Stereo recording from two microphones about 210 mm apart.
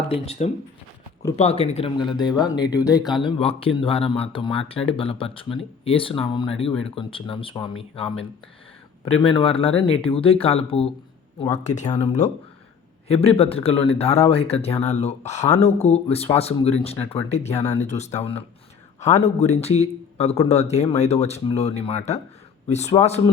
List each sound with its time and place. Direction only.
0.1 s speech: 30° left (ahead or behind)